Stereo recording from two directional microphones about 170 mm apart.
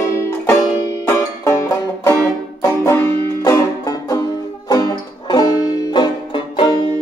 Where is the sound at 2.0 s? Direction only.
15° left (ahead or behind).